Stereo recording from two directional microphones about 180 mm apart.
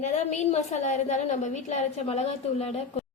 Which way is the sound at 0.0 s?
40° left (ahead or behind).